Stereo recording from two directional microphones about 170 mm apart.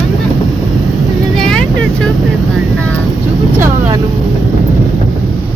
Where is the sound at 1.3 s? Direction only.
5° left (ahead or behind).